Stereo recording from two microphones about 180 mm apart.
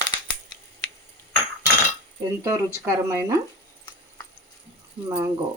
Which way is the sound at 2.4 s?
15° right (ahead or behind).